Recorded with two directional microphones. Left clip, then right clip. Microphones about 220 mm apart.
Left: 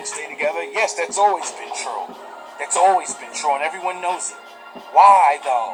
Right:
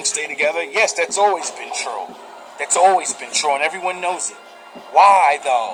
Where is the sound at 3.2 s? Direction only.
65° right (ahead or behind).